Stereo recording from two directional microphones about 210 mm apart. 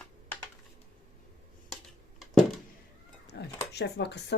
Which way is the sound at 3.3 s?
55° left (ahead or behind).